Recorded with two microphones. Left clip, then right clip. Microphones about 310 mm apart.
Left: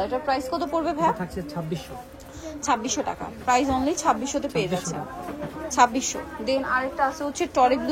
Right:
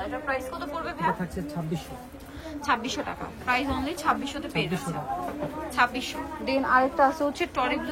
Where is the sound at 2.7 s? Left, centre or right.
Centre.